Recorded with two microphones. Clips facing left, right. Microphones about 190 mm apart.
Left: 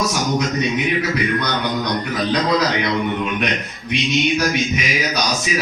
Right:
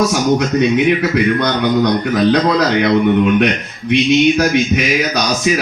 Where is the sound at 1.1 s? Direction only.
60° right (ahead or behind).